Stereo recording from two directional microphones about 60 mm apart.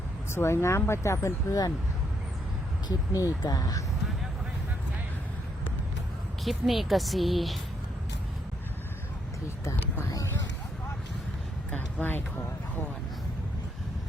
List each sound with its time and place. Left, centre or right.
0.3 s speech: left
3.1 s speech: left
6.4 s speech: centre
9.6 s speech: left
11.7 s a sound: left